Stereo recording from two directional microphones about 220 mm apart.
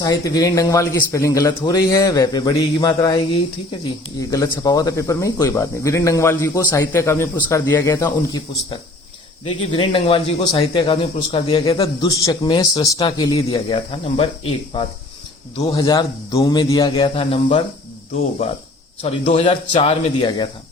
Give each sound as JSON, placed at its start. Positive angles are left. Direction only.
{"t": 0.0, "sound": "speech", "side_deg": 15}
{"t": 4.2, "sound": "speech", "side_deg": 15}
{"t": 9.7, "sound": "speech", "side_deg": 25}
{"t": 19.0, "sound": "speech", "side_deg": 25}